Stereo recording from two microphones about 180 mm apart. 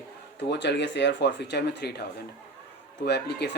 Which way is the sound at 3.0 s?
65° left (ahead or behind).